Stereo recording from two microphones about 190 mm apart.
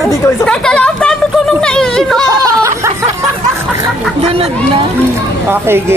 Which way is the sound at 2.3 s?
20° right (ahead or behind).